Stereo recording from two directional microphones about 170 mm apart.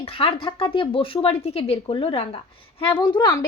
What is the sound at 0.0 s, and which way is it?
A woman's voice, 35° left (ahead or behind).